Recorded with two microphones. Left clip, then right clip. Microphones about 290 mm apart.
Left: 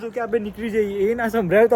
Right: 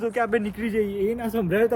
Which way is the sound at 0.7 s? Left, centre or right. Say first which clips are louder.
Left 5 dB; left.